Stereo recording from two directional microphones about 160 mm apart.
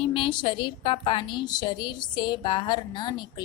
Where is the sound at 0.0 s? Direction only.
35° left (ahead or behind).